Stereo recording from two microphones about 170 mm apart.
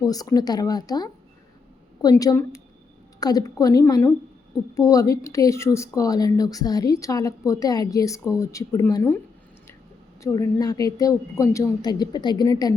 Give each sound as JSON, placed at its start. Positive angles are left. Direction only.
{"t": 0.0, "sound": "speech", "side_deg": 20}
{"t": 10.2, "sound": "speech", "side_deg": 20}